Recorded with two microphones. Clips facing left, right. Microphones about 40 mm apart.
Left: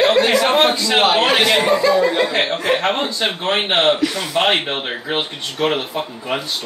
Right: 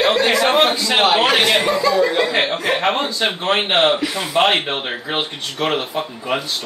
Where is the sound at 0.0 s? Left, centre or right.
Centre.